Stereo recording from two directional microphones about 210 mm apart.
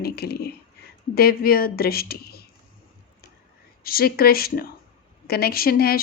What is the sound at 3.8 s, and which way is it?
Speech, 45° left (ahead or behind).